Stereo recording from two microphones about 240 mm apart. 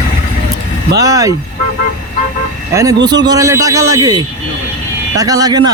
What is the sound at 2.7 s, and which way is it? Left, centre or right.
A man's voice, centre.